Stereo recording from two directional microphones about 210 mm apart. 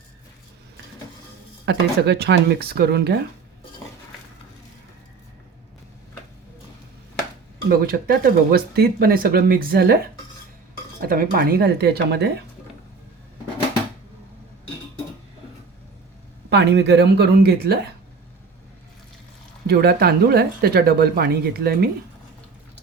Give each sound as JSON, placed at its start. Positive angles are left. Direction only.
{"t": 1.6, "sound": "speech", "side_deg": -50}
{"t": 7.7, "sound": "speech", "side_deg": -45}
{"t": 11.0, "sound": "speech", "side_deg": -45}
{"t": 16.5, "sound": "speech", "side_deg": -50}
{"t": 19.6, "sound": "speech", "side_deg": -50}